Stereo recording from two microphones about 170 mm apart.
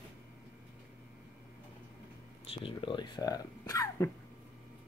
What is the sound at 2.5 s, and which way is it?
Speech, 30° left (ahead or behind).